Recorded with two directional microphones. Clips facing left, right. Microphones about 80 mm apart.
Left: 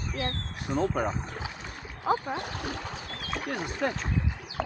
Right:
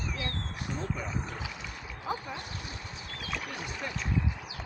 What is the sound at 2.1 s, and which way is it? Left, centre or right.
Speech, left.